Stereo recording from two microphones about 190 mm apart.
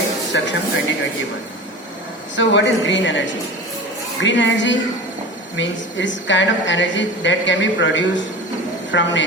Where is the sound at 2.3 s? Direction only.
75° left (ahead or behind).